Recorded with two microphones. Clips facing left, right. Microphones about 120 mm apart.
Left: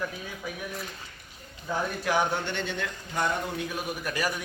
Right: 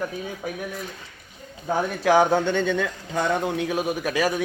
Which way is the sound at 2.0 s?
90° right.